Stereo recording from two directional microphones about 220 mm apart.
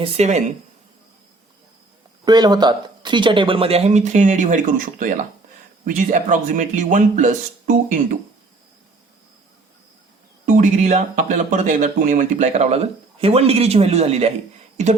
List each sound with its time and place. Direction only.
0.0 s speech: 30° right (ahead or behind)
2.2 s speech: 20° right (ahead or behind); by 8.0 s 35° right (ahead or behind)
10.4 s speech: 35° right (ahead or behind)